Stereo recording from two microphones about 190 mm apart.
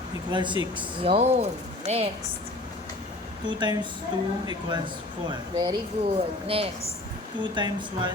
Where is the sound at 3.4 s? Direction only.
25° right (ahead or behind).